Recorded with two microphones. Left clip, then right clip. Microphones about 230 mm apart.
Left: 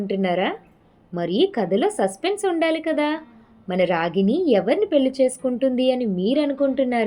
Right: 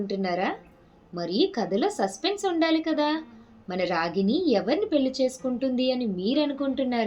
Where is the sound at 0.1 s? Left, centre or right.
Left.